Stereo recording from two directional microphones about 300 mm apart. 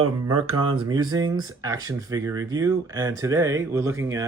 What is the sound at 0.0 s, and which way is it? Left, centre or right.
Speech, centre.